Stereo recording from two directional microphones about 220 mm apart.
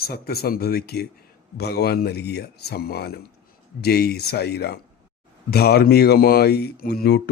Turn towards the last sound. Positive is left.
turn(degrees=45)  # may be behind; listen again after turning